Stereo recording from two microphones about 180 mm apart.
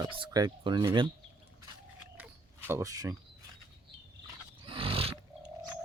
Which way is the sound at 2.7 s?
15° right (ahead or behind).